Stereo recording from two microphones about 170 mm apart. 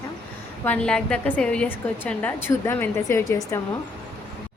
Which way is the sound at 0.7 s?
5° left (ahead or behind).